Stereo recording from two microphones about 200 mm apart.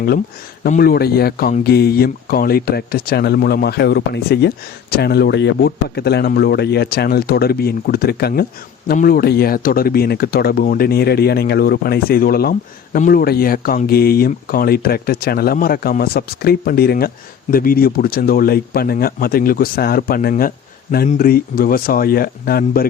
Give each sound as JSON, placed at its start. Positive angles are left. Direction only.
{"t": 0.6, "sound": "speech", "side_deg": 45}